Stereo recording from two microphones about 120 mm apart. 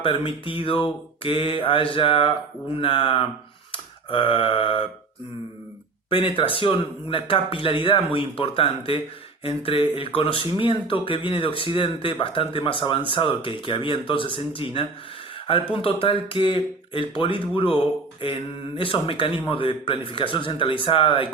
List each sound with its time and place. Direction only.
0.0 s speech: 45° left (ahead or behind)
3.7 s a sound: 45° left (ahead or behind)
6.1 s speech: 45° left (ahead or behind)
18.8 s speech: 50° left (ahead or behind)